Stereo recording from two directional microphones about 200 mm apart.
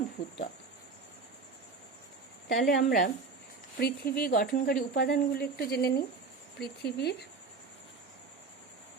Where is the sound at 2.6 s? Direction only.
45° left (ahead or behind).